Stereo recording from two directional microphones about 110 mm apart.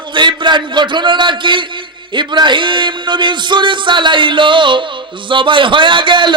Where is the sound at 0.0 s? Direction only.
45° right (ahead or behind).